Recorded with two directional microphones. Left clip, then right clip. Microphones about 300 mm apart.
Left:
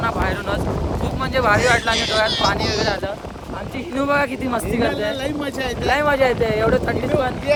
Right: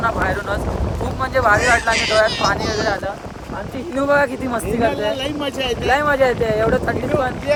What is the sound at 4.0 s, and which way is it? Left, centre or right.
Speech, centre.